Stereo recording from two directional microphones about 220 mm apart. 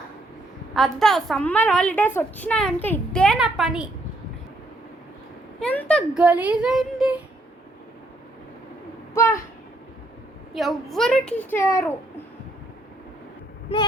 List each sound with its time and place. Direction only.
0.8 s a woman's voice: centre (ahead or behind)
5.5 s a woman's voice: 5° left (ahead or behind)
9.1 s a sound: 15° left (ahead or behind)
10.5 s a woman's voice: centre (ahead or behind)